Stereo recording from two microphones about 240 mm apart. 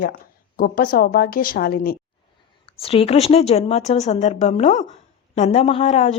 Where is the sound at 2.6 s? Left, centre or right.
Left.